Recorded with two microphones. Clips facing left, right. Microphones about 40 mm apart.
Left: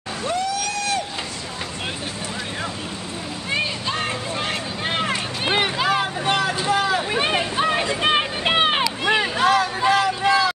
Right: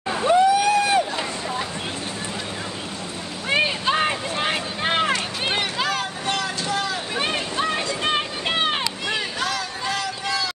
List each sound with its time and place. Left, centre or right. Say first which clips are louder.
0.2 s vehicle: right 8 dB; right
3.4 s boat: right 4 dB; right
5.1 s run: left 1 dB; centre
5.9 s vehicle: left 4 dB; centre